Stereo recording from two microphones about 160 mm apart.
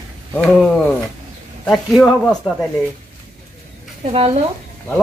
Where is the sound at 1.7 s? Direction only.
Centre (ahead or behind).